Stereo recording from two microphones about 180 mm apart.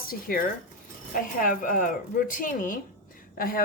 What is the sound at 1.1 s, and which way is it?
A woman's voice, 50° left (ahead or behind).